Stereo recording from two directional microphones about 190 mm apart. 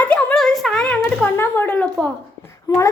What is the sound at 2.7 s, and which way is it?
Speech, 20° left (ahead or behind).